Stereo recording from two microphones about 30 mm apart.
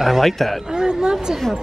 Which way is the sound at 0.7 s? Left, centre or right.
Right.